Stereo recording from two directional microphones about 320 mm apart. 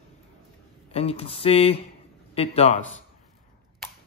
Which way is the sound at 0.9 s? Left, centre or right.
Centre.